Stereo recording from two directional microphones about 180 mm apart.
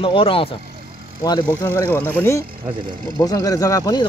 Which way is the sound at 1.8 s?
10° left (ahead or behind).